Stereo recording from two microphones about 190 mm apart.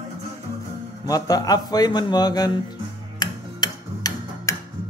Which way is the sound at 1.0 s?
20° left (ahead or behind).